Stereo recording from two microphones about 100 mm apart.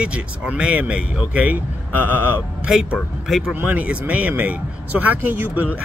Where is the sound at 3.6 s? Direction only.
15° right (ahead or behind).